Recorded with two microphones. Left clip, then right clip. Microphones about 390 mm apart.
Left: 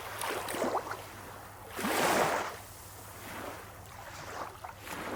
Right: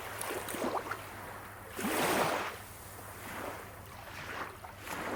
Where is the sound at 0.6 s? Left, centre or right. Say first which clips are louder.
Left 2 dB; left.